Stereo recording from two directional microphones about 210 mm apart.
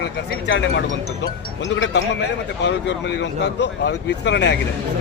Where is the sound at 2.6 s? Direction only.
55° left (ahead or behind).